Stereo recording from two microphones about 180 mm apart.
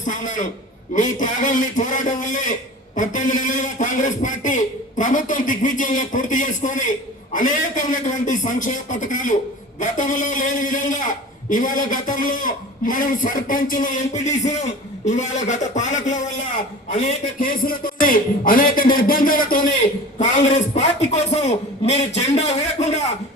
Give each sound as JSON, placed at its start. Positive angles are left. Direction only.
{"t": 0.0, "sound": "a man's voice", "side_deg": 45}